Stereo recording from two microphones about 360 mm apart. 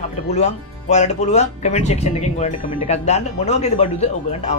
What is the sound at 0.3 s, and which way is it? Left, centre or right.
Speech, centre.